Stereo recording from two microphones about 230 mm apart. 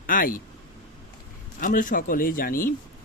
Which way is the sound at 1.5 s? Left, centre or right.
Left.